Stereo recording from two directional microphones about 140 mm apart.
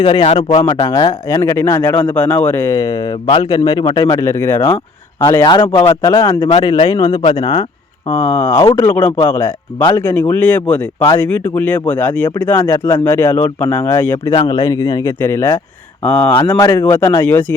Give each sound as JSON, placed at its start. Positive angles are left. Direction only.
{"t": 0.0, "sound": "speech", "side_deg": 40}
{"t": 0.4, "sound": "a man's voice", "side_deg": 20}
{"t": 5.4, "sound": "a man's voice", "side_deg": 30}
{"t": 5.8, "sound": "a man's voice", "side_deg": 20}
{"t": 8.1, "sound": "speech", "side_deg": 15}
{"t": 8.5, "sound": "a man's voice", "side_deg": 35}
{"t": 8.9, "sound": "speech", "side_deg": 15}
{"t": 14.3, "sound": "a man's voice", "side_deg": 30}